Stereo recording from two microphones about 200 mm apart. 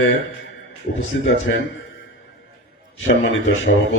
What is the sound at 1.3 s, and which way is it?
Speech, 75° left (ahead or behind).